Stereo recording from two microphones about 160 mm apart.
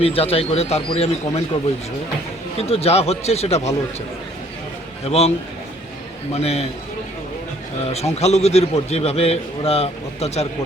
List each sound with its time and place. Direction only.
0.0 s a man's voice: 40° left (ahead or behind)
2.6 s a man's voice: 40° left (ahead or behind)
5.0 s a man's voice: 40° left (ahead or behind)
6.3 s a man's voice: 40° left (ahead or behind)
7.9 s a man's voice: 40° left (ahead or behind)